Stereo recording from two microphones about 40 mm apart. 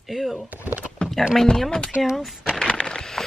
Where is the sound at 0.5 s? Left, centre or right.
Right.